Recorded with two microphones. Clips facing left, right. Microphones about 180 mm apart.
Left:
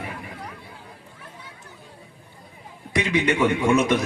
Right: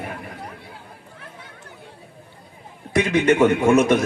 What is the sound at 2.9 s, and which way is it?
A man's voice, 50° right (ahead or behind).